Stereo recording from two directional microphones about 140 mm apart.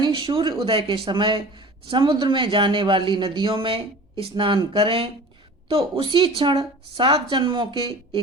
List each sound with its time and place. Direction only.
0.0 s speech: 40° right (ahead or behind)